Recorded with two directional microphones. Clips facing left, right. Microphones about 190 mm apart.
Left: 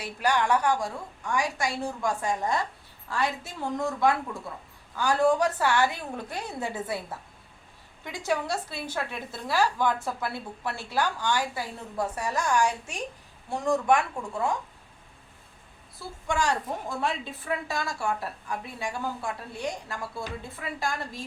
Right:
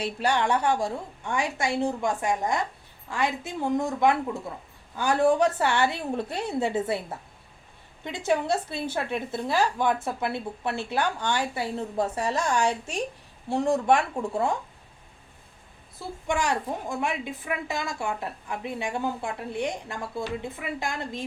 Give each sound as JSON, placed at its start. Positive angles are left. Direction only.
{"t": 0.2, "sound": "a woman's voice", "side_deg": -25}
{"t": 16.2, "sound": "a woman's voice", "side_deg": -20}